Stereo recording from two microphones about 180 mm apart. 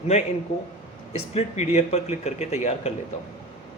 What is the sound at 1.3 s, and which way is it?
Speech, 40° left (ahead or behind).